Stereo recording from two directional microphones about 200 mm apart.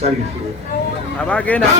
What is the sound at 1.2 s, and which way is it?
Speech, 5° left (ahead or behind).